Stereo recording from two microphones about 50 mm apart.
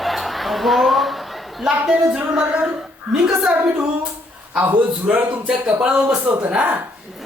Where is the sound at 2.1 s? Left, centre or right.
Right.